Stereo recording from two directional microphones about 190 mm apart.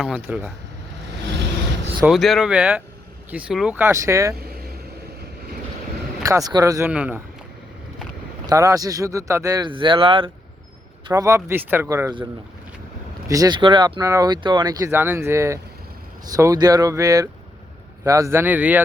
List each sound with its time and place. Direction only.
0.0 s speech: 5° right (ahead or behind)
1.2 s vehicle: 65° right (ahead or behind)
2.0 s speech: centre (ahead or behind); by 4.4 s 15° right (ahead or behind)
4.4 s vehicle: 55° right (ahead or behind)
6.2 s speech: 20° right (ahead or behind)
8.4 s speech: 15° right (ahead or behind)